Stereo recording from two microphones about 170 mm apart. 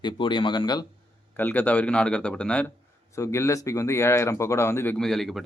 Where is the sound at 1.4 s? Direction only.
10° left (ahead or behind).